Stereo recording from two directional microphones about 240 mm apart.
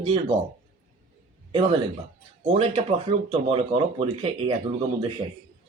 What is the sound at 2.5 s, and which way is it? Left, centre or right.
Speech, right.